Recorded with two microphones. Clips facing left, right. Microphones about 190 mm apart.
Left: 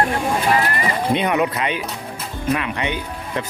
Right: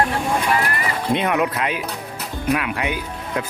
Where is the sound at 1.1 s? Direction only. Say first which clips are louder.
Right 1 dB; centre (ahead or behind).